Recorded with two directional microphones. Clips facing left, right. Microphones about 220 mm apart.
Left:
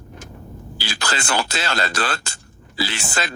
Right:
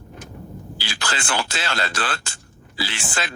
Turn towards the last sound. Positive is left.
turn(degrees=40)  # may be behind; listen again after turning